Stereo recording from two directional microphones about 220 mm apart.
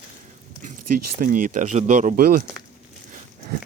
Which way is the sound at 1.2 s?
40° right (ahead or behind).